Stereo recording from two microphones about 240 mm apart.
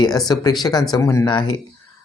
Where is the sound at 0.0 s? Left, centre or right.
Centre.